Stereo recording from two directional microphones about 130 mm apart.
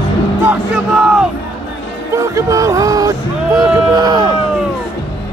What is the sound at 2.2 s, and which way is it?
Music, 25° right (ahead or behind).